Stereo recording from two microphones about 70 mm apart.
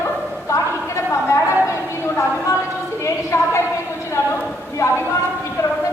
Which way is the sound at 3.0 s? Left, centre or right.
Left.